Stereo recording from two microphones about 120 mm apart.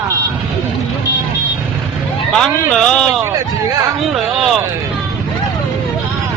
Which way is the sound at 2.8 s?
5° left (ahead or behind).